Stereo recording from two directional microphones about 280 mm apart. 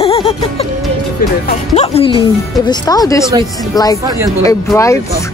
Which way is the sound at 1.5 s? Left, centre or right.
Left.